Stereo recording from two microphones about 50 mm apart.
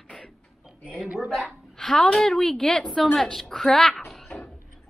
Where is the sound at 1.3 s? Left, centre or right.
Centre.